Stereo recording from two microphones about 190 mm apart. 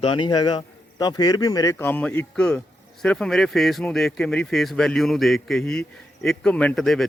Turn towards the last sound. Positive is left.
turn(degrees=0)  # may be behind; listen again after turning